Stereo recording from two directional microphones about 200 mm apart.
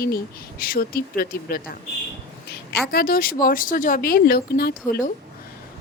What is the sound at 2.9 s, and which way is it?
Speech, 50° left (ahead or behind).